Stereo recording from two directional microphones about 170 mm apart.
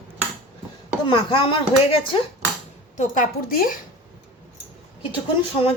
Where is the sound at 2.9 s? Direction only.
50° left (ahead or behind).